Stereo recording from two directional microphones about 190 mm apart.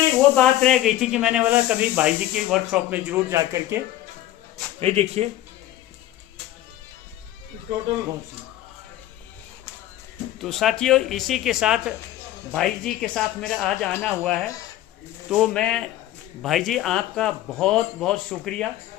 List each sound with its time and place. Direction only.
0.3 s speech: 5° left (ahead or behind); by 3.8 s 15° right (ahead or behind)
4.8 s speech: 35° right (ahead or behind)
10.4 s speech: centre (ahead or behind)